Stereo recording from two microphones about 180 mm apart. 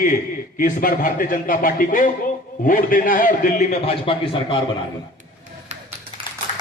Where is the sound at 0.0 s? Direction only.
45° left (ahead or behind); by 4.5 s 30° left (ahead or behind).